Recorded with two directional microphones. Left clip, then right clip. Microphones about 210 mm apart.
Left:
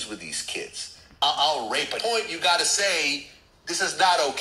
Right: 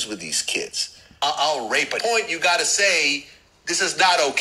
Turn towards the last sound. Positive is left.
turn(degrees=-30)  # may be behind; listen again after turning